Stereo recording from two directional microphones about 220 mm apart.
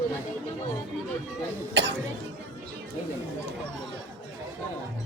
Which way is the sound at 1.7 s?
55° right (ahead or behind).